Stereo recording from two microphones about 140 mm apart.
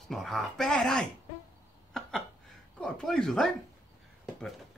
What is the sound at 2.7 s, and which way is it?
Speech, 5° left (ahead or behind).